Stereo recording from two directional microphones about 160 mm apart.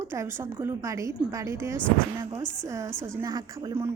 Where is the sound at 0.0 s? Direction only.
15° right (ahead or behind).